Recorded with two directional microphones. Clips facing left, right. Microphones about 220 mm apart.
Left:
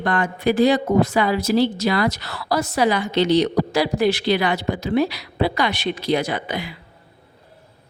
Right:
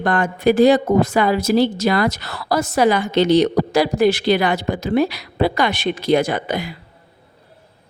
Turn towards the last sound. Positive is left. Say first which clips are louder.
# right 4 dB
turn(degrees=-45)  # may be behind; listen again after turning